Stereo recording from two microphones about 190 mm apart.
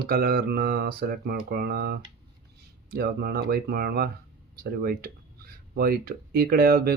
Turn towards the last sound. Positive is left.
turn(degrees=-50)  # may be behind; listen again after turning